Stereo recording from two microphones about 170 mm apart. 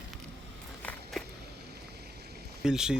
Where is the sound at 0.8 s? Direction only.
5° left (ahead or behind).